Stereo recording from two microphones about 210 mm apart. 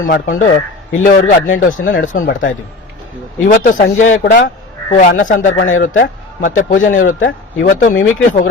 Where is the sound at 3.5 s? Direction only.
40° left (ahead or behind).